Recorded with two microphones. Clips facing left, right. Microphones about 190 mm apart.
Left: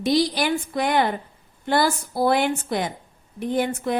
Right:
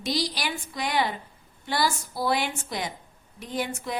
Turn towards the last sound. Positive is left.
turn(degrees=55)  # may be behind; listen again after turning